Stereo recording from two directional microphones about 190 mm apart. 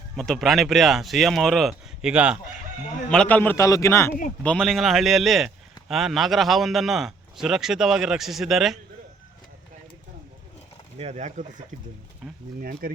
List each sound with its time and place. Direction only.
0.2 s speech: centre (ahead or behind)
3.1 s a man's voice: 5° left (ahead or behind)
4.4 s speech: 5° left (ahead or behind)
10.9 s speech: 35° right (ahead or behind)
12.5 s speech: 50° right (ahead or behind)